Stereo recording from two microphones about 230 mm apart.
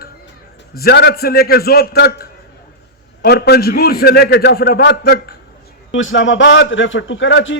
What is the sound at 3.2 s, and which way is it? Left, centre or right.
A man's voice, left.